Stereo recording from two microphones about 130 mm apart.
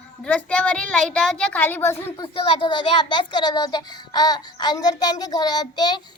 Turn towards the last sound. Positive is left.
turn(degrees=30)  # may be behind; listen again after turning